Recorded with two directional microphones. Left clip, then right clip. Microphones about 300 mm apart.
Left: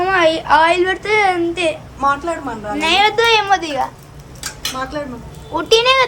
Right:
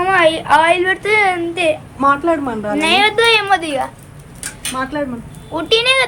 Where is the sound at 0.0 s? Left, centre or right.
Centre.